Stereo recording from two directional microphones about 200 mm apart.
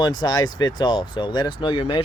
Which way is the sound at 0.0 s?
20° left (ahead or behind).